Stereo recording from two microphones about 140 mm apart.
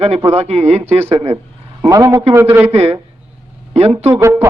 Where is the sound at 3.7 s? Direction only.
45° right (ahead or behind).